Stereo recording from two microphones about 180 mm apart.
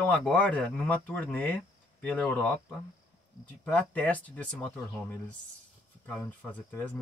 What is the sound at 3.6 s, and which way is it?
Speech, 10° left (ahead or behind).